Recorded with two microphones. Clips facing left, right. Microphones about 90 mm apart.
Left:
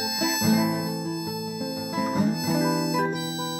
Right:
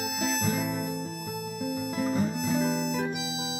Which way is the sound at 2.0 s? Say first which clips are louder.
Left 4 dB; 10° left (ahead or behind).